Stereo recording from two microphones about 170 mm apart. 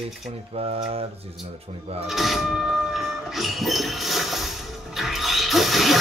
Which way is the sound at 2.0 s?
Centre (ahead or behind).